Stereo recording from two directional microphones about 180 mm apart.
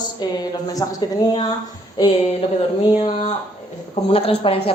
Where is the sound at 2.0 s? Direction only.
30° left (ahead or behind).